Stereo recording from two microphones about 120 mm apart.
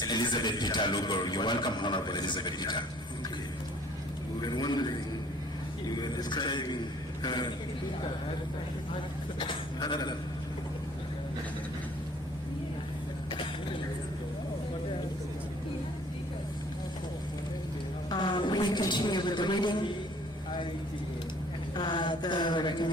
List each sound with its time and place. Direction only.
0.0 s a man's voice: 35° left (ahead or behind)
4.4 s a man's voice: 35° left (ahead or behind)
6.0 s a man's voice: 35° left (ahead or behind)
9.4 s a sound: 40° left (ahead or behind)
18.1 s a sound: 40° left (ahead or behind)
21.8 s a man's voice: 40° left (ahead or behind)